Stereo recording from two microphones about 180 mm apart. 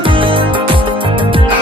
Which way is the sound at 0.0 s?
30° right (ahead or behind).